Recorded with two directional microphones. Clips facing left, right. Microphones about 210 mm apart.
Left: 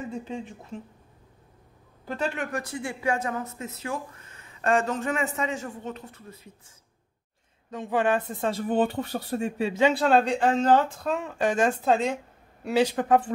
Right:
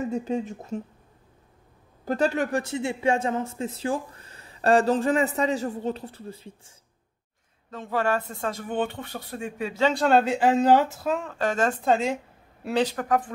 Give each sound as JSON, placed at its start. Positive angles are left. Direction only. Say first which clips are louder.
{"t": 0.0, "sound": "speech", "louder": "right 7 dB", "side_deg": -40}
{"t": 2.0, "sound": "speech", "louder": "right 6 dB", "side_deg": -40}
{"t": 7.7, "sound": "speech", "louder": "left 1 dB", "side_deg": 15}
{"t": 9.9, "sound": "speech", "louder": "right 1 dB", "side_deg": 0}
{"t": 11.2, "sound": "speech", "louder": "left 4 dB", "side_deg": 15}
{"t": 11.8, "sound": "speech", "louder": "right 1 dB", "side_deg": 0}
{"t": 12.9, "sound": "speech", "louder": "left 3 dB", "side_deg": 25}